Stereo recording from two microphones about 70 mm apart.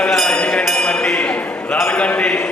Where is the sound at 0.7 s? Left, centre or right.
Centre.